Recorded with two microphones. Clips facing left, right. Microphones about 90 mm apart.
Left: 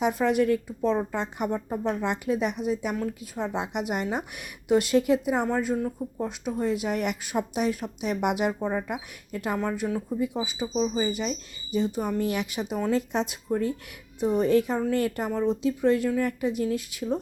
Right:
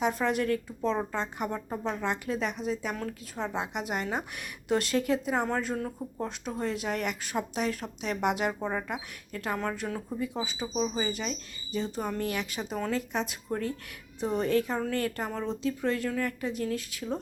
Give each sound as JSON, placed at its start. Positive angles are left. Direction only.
{"t": 0.0, "sound": "speech", "side_deg": 15}